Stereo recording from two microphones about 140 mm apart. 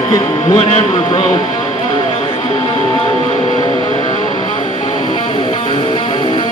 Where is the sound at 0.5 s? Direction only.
40° left (ahead or behind).